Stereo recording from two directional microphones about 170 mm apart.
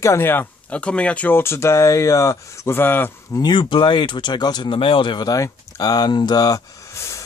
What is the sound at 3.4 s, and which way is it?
Speech, 25° left (ahead or behind).